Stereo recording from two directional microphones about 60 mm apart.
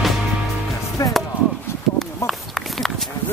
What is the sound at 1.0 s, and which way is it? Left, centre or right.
Music, left.